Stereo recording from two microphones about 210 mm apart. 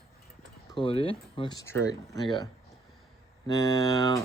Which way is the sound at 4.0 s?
20° left (ahead or behind).